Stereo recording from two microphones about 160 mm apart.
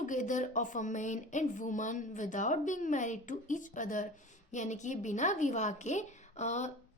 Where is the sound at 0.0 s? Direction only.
50° left (ahead or behind).